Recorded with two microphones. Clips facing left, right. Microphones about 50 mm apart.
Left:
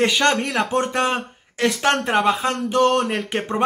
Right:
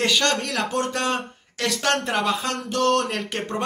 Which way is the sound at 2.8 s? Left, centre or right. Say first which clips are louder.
Left 2 dB; centre.